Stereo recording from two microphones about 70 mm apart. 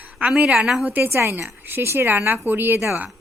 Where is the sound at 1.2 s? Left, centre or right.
Right.